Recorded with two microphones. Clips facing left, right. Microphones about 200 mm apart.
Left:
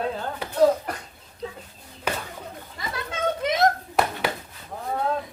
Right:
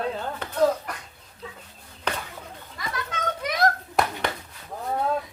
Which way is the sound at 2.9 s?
25° left (ahead or behind).